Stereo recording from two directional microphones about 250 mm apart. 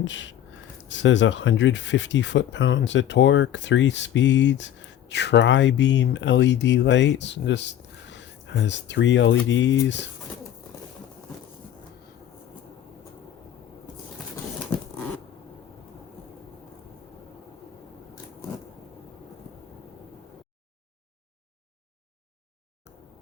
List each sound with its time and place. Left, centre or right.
0.0 s speech: left